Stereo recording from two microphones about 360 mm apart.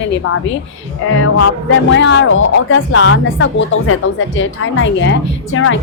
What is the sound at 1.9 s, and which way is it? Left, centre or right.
A woman's voice, left.